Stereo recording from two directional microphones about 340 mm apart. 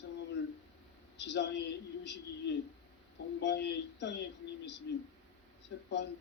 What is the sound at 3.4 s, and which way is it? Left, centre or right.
Speech, left.